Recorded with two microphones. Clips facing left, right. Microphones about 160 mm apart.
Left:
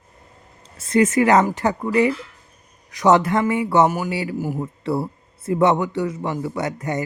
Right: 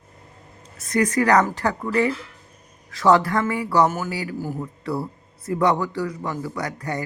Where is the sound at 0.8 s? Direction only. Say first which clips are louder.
Left 4 dB; 25° left (ahead or behind).